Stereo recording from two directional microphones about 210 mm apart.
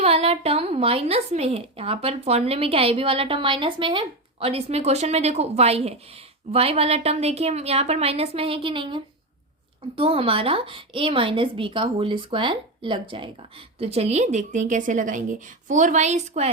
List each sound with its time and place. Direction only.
0.0 s a woman's voice: 30° right (ahead or behind)